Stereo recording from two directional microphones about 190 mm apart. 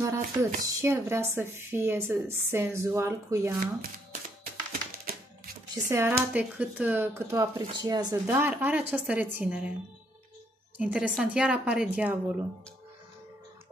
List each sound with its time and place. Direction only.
0.0 s speech: 15° right (ahead or behind)
3.5 s speech: 50° right (ahead or behind)
5.0 s music: 50° right (ahead or behind)
5.9 s speech: 10° right (ahead or behind)
10.8 s a woman's voice: 5° right (ahead or behind)